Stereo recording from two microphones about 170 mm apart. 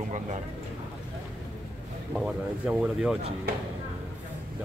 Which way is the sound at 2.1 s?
5° right (ahead or behind).